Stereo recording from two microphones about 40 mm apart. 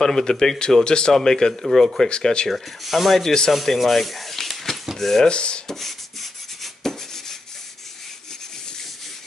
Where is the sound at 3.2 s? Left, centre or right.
Centre.